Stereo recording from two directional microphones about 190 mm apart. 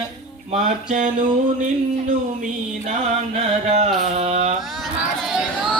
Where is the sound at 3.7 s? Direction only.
35° right (ahead or behind).